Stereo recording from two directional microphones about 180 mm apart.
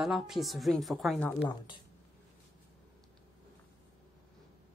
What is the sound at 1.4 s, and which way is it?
Speech, 25° left (ahead or behind).